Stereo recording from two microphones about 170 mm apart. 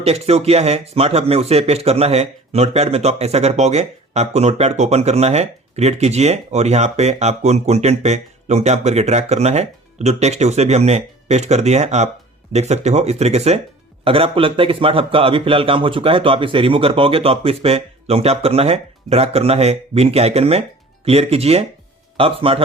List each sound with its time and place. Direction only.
0.0 s speech: 40° right (ahead or behind)